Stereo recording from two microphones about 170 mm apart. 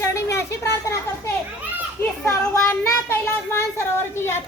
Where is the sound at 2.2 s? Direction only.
15° left (ahead or behind).